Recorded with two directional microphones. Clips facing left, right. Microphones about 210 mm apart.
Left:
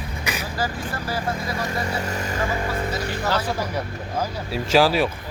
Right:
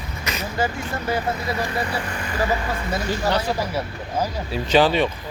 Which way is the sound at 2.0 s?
45° left (ahead or behind).